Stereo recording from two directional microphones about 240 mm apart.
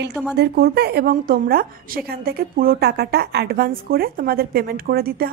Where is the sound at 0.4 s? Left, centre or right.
Right.